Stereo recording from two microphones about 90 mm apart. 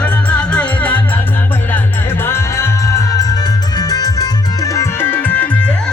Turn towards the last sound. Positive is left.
turn(degrees=15)  # may be behind; listen again after turning